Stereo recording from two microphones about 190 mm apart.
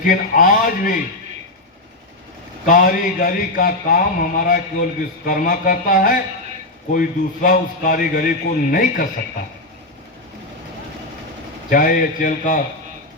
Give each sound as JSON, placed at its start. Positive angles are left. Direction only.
{"t": 0.0, "sound": "a man's voice", "side_deg": 45}
{"t": 2.6, "sound": "a man's voice", "side_deg": 45}
{"t": 11.7, "sound": "a man's voice", "side_deg": 45}